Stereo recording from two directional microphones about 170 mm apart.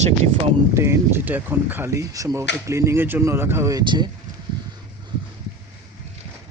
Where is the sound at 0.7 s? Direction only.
15° right (ahead or behind).